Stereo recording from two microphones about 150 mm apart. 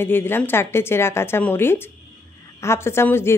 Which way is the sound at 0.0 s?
15° left (ahead or behind).